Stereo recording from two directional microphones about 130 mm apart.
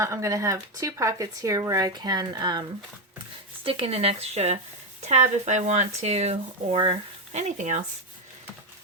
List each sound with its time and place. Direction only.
0.0 s speech: 25° right (ahead or behind)
3.6 s speech: 45° right (ahead or behind)
7.3 s speech: 65° right (ahead or behind)